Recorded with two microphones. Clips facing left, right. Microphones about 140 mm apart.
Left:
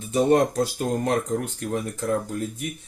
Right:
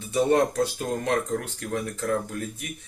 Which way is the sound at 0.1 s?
35° left (ahead or behind).